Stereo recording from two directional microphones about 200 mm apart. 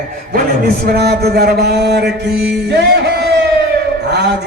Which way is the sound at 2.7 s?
55° right (ahead or behind).